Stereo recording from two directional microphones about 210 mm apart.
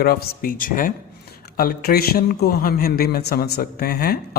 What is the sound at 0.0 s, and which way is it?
A man's voice, 50° left (ahead or behind).